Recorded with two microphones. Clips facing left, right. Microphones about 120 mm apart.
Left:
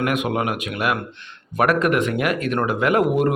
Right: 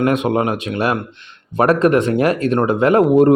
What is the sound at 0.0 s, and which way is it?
Speech, 30° right (ahead or behind).